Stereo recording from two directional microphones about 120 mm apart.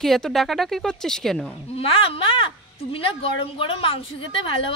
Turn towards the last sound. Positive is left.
turn(degrees=50)  # may be behind; listen again after turning